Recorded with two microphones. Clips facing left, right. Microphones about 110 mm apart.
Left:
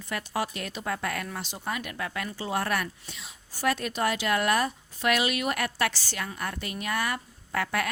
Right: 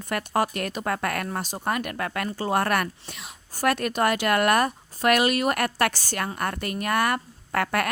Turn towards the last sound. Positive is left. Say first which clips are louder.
# right 4 dB
turn(degrees=-55)  # may be behind; listen again after turning